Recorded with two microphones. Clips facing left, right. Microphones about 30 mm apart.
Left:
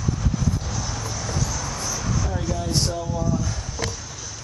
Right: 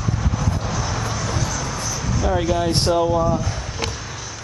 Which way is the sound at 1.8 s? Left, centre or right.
Right.